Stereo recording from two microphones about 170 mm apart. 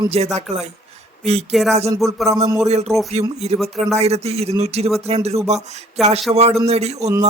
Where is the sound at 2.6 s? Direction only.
40° right (ahead or behind).